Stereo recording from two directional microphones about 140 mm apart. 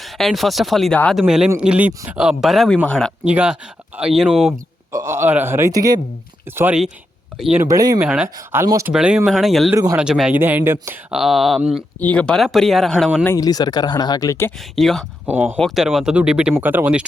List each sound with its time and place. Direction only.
0.0 s speech: centre (ahead or behind)
3.2 s speech: 5° right (ahead or behind)
4.9 s a man's voice: 20° right (ahead or behind)
7.3 s speech: 5° right (ahead or behind)
7.6 s a man's voice: 25° right (ahead or behind)
7.9 s speech: 5° right (ahead or behind)
8.4 s a man's voice: 25° right (ahead or behind)
8.9 s speech: 5° right (ahead or behind)
11.1 s speech: centre (ahead or behind)
11.9 s speech: 10° left (ahead or behind)
13.2 s speech: 25° left (ahead or behind)
14.6 s speech: centre (ahead or behind)
15.3 s speech: 15° right (ahead or behind)
15.5 s speech: centre (ahead or behind)